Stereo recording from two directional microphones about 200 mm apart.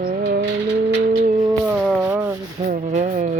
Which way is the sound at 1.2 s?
35° right (ahead or behind).